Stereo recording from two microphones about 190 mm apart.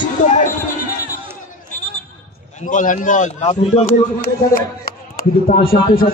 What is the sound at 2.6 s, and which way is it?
A man's voice, 40° left (ahead or behind).